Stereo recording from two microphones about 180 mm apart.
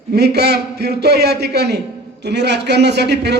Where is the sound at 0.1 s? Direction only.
65° right (ahead or behind).